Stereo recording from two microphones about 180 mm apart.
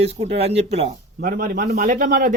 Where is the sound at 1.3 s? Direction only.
55° right (ahead or behind).